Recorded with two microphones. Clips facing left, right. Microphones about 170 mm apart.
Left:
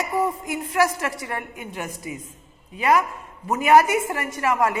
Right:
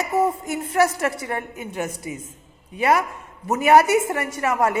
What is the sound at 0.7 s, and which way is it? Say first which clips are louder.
A woman's voice: right 2 dB; 35° right (ahead or behind).